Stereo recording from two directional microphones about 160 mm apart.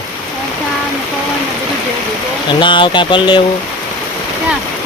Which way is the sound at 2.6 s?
30° left (ahead or behind).